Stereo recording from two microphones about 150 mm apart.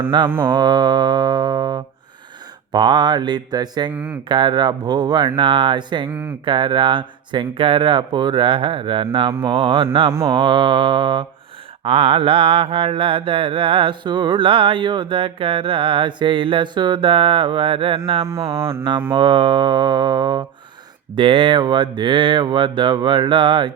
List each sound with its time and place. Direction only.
0.3 s music: 15° right (ahead or behind)
0.5 s music: 30° right (ahead or behind)
2.7 s mantra: 30° right (ahead or behind)
3.9 s music: 10° right (ahead or behind)
4.3 s mantra: 30° right (ahead or behind)